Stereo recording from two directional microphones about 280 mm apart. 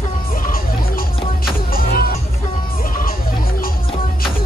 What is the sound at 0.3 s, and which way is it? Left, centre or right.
Music, left.